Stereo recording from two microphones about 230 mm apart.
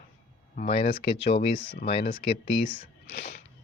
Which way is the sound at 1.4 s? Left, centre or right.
Left.